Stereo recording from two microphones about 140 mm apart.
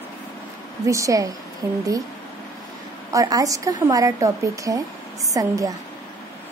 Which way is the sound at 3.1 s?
25° right (ahead or behind).